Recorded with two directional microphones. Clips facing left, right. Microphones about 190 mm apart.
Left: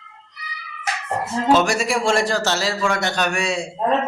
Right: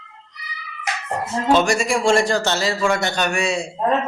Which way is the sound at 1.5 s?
Centre (ahead or behind).